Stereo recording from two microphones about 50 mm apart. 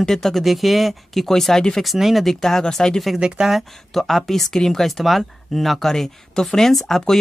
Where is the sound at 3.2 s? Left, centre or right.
Centre.